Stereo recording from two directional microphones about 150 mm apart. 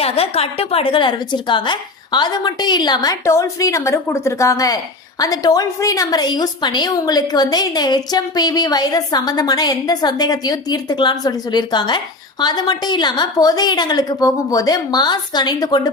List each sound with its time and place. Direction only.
0.0 s a woman's voice: 40° left (ahead or behind)